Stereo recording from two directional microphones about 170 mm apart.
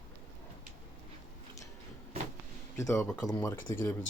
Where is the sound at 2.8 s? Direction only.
15° left (ahead or behind).